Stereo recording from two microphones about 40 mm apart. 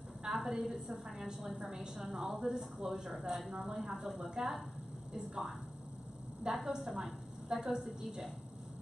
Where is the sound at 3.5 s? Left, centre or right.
Right.